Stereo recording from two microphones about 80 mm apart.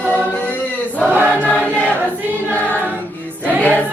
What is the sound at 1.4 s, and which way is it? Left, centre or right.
Choir, centre.